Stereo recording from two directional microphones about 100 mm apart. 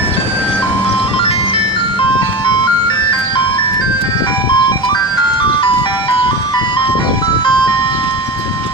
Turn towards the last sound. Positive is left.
turn(degrees=60)  # may be behind; listen again after turning